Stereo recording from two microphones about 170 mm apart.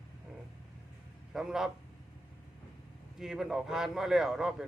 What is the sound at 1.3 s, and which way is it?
Speech, 5° right (ahead or behind).